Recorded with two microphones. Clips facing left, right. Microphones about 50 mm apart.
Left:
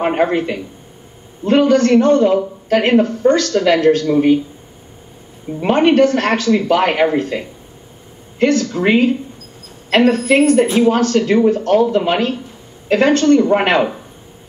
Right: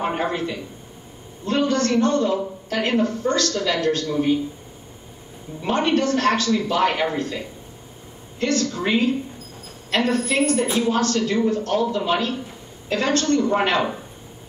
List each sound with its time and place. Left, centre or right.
0.0 s speech: left
2.0 s speech: left
3.5 s speech: left
5.6 s speech: left